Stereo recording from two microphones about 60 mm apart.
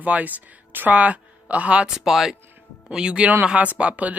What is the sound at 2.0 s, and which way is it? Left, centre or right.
Speech, centre.